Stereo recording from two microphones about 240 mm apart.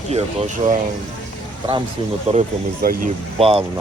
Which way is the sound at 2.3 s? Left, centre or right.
Right.